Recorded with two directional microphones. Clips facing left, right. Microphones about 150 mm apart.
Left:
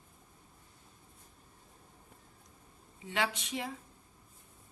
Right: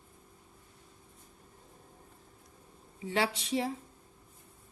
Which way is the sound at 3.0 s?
30° right (ahead or behind).